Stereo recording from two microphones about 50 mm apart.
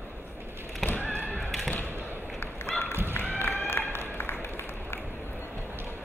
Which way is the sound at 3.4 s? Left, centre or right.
Left.